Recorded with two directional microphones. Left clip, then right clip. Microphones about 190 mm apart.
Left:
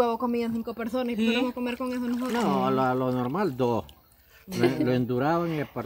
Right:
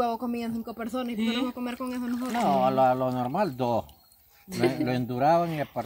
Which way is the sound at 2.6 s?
25° right (ahead or behind).